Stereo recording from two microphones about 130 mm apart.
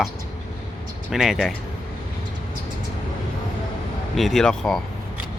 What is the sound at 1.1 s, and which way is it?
Speech, 5° right (ahead or behind).